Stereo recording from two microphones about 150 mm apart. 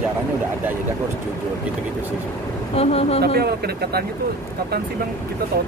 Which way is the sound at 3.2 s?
90° right.